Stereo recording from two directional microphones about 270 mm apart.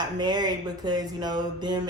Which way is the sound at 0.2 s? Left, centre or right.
Centre.